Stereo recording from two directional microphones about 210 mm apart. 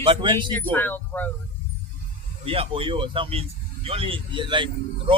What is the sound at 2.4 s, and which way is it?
A man's voice, 25° right (ahead or behind).